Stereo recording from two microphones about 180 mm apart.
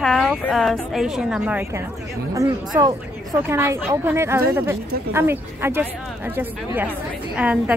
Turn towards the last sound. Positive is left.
turn(degrees=-5)  # may be behind; listen again after turning